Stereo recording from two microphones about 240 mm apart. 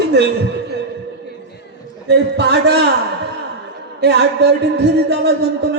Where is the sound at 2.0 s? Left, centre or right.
Right.